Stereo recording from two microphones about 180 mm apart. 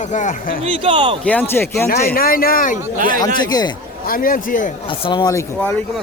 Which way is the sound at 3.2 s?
20° left (ahead or behind).